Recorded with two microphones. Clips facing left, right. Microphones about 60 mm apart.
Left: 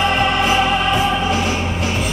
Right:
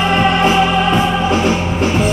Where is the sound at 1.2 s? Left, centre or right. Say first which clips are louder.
Right 4 dB; right.